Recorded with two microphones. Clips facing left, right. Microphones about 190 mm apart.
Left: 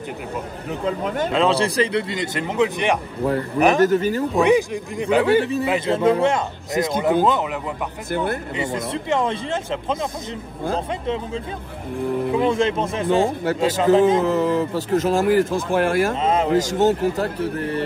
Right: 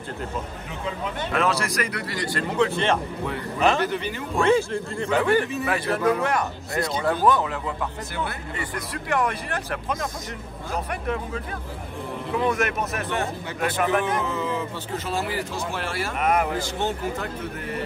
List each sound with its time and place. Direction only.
0.8 s speech: 45° left (ahead or behind)
1.3 s a man's voice: 25° left (ahead or behind)
3.8 s speech: 45° left (ahead or behind)
4.4 s a man's voice: 15° left (ahead or behind)
8.5 s speech: 25° left (ahead or behind)
14.2 s speech: 40° left (ahead or behind)
16.2 s speech: 25° left (ahead or behind)
16.5 s speech: 45° left (ahead or behind)